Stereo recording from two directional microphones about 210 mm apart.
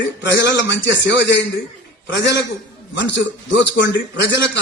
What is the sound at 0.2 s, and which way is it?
A man's voice, 55° left (ahead or behind).